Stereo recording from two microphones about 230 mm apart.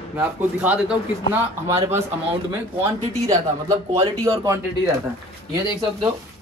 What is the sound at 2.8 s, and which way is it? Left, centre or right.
Speech, centre.